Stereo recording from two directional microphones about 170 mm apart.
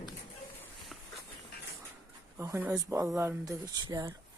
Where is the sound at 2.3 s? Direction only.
15° right (ahead or behind).